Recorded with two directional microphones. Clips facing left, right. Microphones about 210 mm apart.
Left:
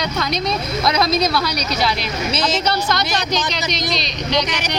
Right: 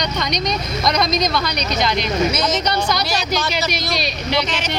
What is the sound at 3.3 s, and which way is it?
Speech, 20° left (ahead or behind).